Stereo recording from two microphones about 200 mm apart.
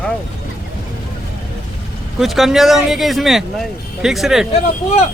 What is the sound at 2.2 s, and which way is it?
Speech, centre (ahead or behind).